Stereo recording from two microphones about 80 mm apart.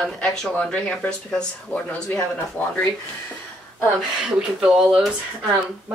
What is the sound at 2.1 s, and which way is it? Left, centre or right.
Speech, left.